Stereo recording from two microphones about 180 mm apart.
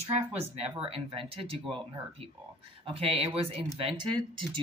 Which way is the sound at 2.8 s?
30° right (ahead or behind).